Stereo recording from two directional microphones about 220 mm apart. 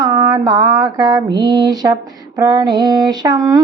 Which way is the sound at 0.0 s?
15° right (ahead or behind).